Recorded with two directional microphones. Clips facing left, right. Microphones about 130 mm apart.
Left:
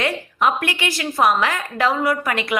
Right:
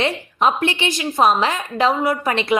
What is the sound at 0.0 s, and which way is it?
A woman's voice, 25° right (ahead or behind).